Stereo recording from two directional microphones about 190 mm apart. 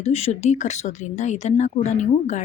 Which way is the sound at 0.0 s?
35° left (ahead or behind).